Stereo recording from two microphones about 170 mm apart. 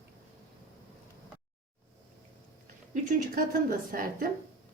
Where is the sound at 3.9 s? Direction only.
55° right (ahead or behind).